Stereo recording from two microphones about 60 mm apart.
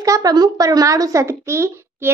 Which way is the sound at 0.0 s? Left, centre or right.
Right.